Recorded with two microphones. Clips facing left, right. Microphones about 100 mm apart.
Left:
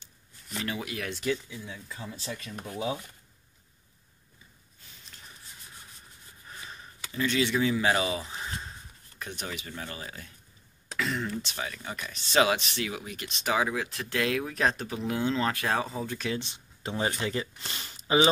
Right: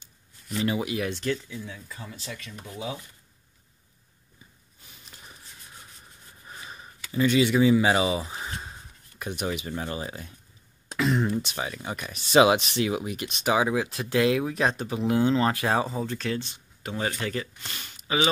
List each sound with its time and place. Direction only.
0.7 s speech: 10° right (ahead or behind)
1.2 s speech: 10° left (ahead or behind)
2.2 s speech: 30° left (ahead or behind)
6.5 s a sound: 10° right (ahead or behind)
9.2 s speech: 15° right (ahead or behind)
16.1 s speech: 10° left (ahead or behind); by 18.3 s 30° left (ahead or behind)